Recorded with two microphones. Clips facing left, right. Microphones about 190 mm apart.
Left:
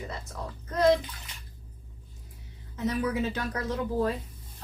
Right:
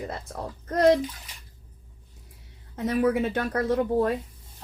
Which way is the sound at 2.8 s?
50° right (ahead or behind).